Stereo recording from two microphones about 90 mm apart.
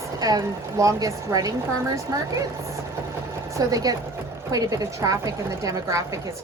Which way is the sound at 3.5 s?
45° right (ahead or behind).